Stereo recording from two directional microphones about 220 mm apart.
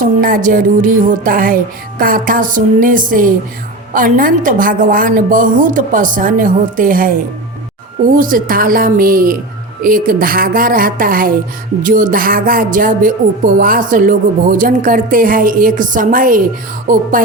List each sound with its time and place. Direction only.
0.0 s speech: 40° right (ahead or behind)
8.2 s speech: 40° right (ahead or behind)